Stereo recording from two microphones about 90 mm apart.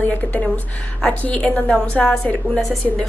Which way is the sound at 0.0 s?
20° left (ahead or behind).